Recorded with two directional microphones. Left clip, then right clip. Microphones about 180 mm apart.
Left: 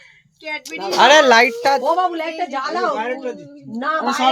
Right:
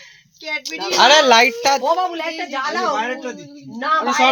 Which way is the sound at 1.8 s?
60° left (ahead or behind).